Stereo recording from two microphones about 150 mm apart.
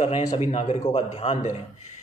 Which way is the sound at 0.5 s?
45° left (ahead or behind).